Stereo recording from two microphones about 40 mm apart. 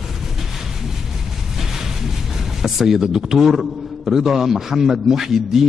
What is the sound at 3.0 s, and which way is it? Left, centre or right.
A man's voice, centre.